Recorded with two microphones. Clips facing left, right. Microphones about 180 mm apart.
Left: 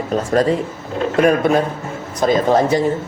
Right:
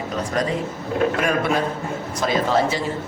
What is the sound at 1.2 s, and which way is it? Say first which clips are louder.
A man's voice: left 7 dB; 40° left (ahead or behind).